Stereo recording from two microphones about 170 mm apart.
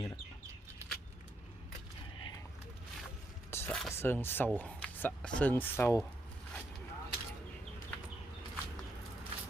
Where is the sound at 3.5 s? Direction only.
15° left (ahead or behind).